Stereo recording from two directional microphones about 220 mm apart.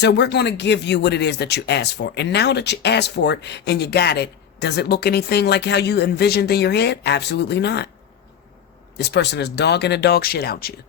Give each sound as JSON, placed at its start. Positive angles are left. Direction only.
{"t": 0.0, "sound": "speech", "side_deg": 50}
{"t": 9.0, "sound": "speech", "side_deg": 50}